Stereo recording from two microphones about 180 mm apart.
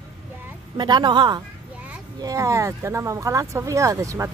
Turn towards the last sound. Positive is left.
turn(degrees=-15)  # may be behind; listen again after turning